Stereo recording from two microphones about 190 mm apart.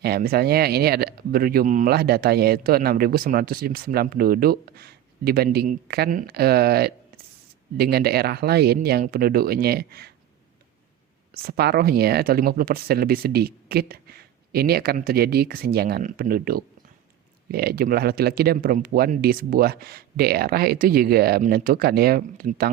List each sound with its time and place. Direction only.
0.0 s speech: 55° right (ahead or behind)
11.4 s speech: 55° right (ahead or behind)